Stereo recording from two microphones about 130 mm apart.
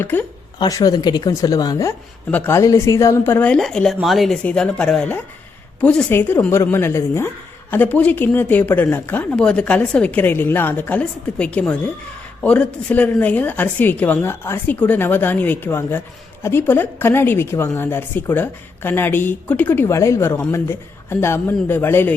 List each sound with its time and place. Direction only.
0.0 s speech: 15° left (ahead or behind)
0.6 s speech: 30° left (ahead or behind)
2.3 s speech: 15° left (ahead or behind)